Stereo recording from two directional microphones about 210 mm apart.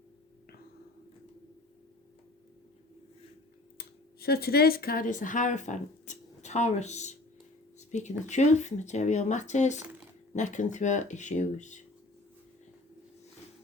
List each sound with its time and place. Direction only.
3.8 s speech: 45° left (ahead or behind)
7.8 s a sound: 35° left (ahead or behind)
8.3 s speech: 35° left (ahead or behind)